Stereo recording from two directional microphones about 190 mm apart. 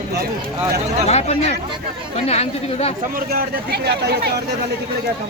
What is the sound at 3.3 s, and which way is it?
Speech, 55° right (ahead or behind).